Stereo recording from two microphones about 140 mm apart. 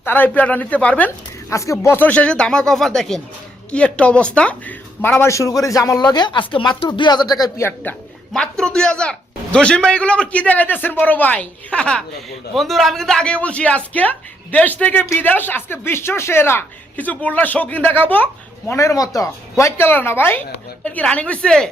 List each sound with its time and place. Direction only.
0.0 s speech: 15° left (ahead or behind); by 7.4 s 30° left (ahead or behind)
7.9 s speech: 15° left (ahead or behind)
18.7 s speech: 20° left (ahead or behind); by 21.7 s 5° left (ahead or behind)